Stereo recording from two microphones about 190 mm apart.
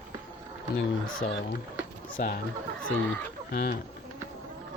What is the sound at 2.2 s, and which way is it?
Speech, 50° left (ahead or behind).